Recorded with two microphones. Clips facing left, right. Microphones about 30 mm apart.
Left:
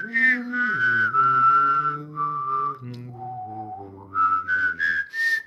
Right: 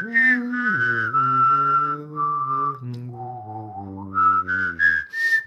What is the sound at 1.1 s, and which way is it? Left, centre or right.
Mantra, left.